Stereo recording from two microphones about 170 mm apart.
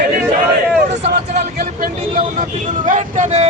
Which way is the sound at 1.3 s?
55° right (ahead or behind).